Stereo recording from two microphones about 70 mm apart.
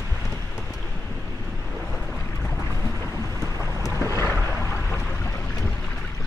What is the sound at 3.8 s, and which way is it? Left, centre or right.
Boat, left.